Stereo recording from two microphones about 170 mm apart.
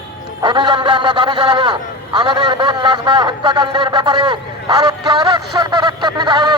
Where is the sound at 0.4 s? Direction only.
25° right (ahead or behind).